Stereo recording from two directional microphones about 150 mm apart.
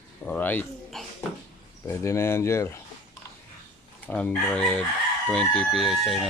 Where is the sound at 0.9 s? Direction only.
Centre (ahead or behind).